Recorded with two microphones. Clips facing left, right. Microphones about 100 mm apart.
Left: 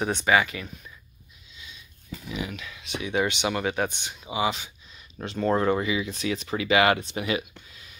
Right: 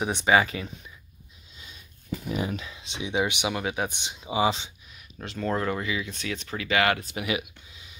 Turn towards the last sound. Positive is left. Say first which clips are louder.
# left 1 dB
turn(degrees=-20)  # may be behind; listen again after turning